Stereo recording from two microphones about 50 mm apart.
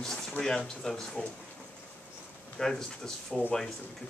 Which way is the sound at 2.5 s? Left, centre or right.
Centre.